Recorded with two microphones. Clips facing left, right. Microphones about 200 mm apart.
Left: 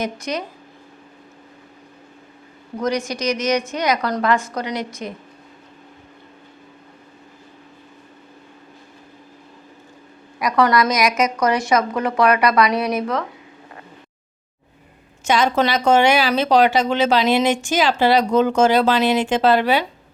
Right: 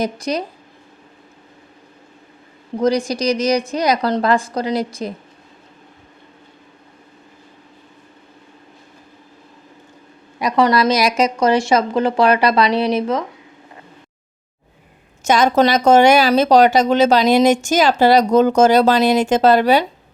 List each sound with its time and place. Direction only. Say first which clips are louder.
0.0 s speech: right 4 dB; 35° right (ahead or behind)
2.7 s speech: right 5 dB; 30° right (ahead or behind)
10.4 s speech: right 2 dB; 25° right (ahead or behind)
15.2 s speech: right 4 dB; 40° right (ahead or behind)